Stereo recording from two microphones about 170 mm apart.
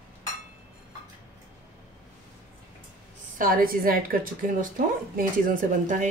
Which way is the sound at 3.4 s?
55° right (ahead or behind).